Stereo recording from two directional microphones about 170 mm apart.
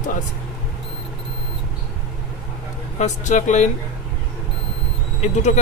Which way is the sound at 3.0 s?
45° left (ahead or behind).